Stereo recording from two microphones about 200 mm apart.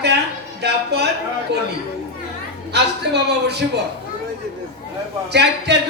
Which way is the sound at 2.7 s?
55° right (ahead or behind).